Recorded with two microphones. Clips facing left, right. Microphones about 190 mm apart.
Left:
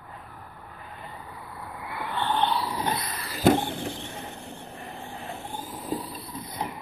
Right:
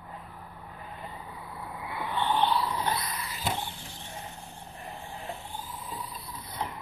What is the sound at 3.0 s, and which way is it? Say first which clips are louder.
Vehicle: left 8 dB; 60° left (ahead or behind).